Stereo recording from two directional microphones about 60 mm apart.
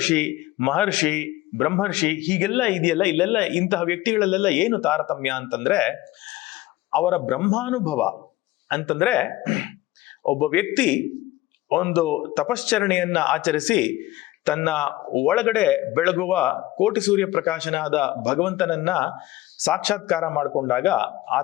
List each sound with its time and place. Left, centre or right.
0.0 s a man's voice: centre